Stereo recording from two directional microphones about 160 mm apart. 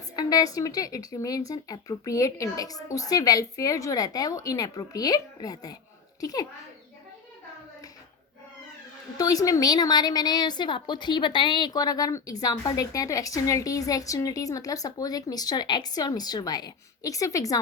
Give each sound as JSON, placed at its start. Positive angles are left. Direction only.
{"t": 0.2, "sound": "a woman's voice", "side_deg": 20}
{"t": 9.1, "sound": "a woman's voice", "side_deg": 20}